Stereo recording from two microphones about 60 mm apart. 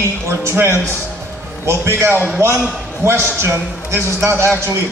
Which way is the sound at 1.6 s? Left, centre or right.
Right.